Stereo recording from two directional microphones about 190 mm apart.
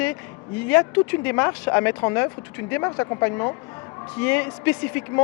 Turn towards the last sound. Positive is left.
turn(degrees=10)  # may be behind; listen again after turning